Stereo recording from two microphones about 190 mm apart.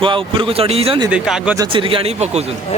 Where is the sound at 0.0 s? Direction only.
25° right (ahead or behind).